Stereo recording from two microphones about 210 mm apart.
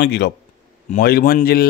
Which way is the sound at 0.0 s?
55° left (ahead or behind).